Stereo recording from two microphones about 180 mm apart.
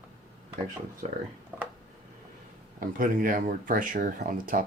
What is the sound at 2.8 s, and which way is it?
Speech, 50° right (ahead or behind).